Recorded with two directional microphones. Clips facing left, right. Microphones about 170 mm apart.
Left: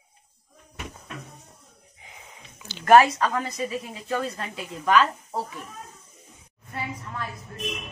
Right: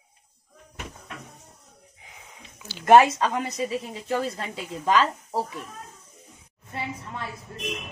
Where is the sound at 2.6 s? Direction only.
10° right (ahead or behind).